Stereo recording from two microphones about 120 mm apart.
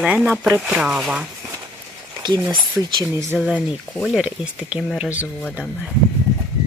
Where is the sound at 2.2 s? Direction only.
35° right (ahead or behind).